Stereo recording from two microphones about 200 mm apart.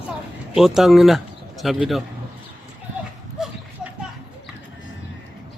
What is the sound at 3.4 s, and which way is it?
Horse, 5° right (ahead or behind).